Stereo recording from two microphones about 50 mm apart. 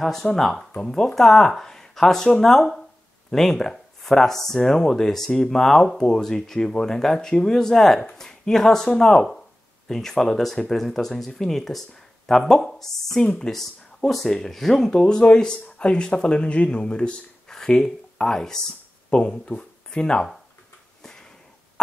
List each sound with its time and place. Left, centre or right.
0.0 s speech: centre
19.0 s speech: left
21.0 s a sound: centre